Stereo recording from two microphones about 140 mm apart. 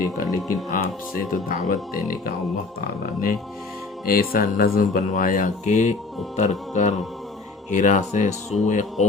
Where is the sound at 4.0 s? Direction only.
90° left; by 9.0 s 60° left (ahead or behind).